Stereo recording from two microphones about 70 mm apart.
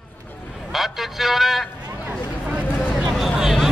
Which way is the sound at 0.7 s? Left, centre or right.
Centre.